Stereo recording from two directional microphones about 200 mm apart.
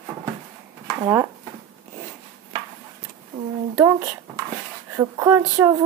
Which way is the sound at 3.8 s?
15° right (ahead or behind).